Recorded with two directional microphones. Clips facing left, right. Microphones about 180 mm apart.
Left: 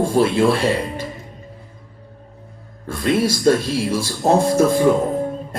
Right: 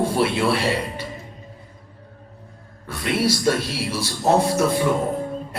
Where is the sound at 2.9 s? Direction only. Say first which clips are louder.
Left 3 dB; 50° left (ahead or behind).